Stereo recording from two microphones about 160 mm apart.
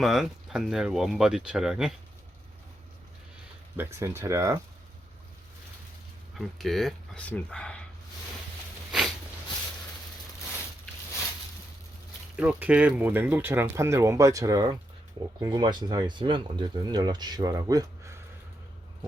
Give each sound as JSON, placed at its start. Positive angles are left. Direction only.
{"t": 0.0, "sound": "speech", "side_deg": 0}
{"t": 3.8, "sound": "speech", "side_deg": -15}
{"t": 6.3, "sound": "speech", "side_deg": 0}
{"t": 8.9, "sound": "a sound", "side_deg": -5}
{"t": 12.4, "sound": "speech", "side_deg": -10}